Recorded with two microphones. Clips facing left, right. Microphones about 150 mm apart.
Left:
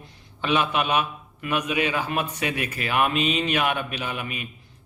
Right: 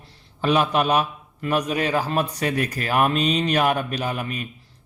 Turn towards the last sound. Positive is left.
turn(degrees=-40)  # may be behind; listen again after turning